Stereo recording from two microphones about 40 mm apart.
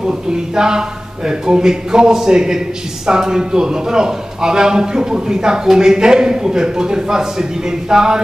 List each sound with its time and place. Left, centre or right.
0.0 s a man's voice: centre